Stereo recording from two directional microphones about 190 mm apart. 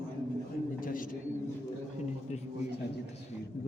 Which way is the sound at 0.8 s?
45° left (ahead or behind).